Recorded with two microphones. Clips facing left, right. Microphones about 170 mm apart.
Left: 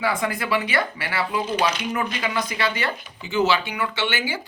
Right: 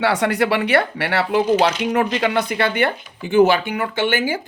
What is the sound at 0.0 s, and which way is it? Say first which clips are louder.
Speech: right 7 dB; 75° right (ahead or behind).